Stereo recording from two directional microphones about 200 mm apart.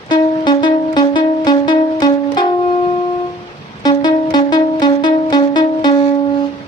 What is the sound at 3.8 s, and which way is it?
Music, 20° left (ahead or behind).